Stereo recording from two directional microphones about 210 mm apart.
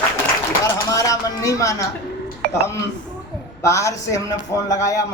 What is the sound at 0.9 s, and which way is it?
Speech, 15° left (ahead or behind).